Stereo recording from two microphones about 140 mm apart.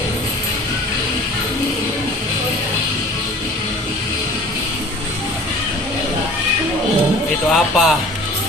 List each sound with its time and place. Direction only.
7.5 s speech: centre (ahead or behind)